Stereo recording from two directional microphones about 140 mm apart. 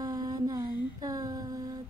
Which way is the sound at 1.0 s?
25° right (ahead or behind).